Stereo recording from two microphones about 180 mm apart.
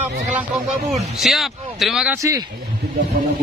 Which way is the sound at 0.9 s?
Centre (ahead or behind).